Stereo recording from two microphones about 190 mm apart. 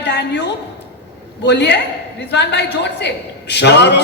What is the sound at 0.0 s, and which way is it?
A woman's voice, 65° left (ahead or behind).